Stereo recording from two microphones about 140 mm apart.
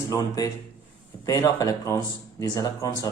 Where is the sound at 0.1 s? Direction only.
25° left (ahead or behind).